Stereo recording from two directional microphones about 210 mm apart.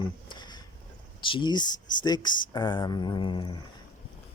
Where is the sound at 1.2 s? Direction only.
25° left (ahead or behind).